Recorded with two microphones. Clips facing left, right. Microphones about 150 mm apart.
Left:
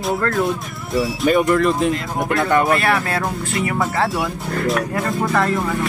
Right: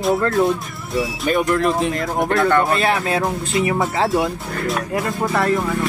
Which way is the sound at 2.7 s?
25° right (ahead or behind).